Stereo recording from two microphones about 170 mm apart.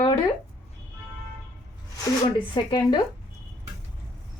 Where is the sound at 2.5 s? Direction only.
25° left (ahead or behind).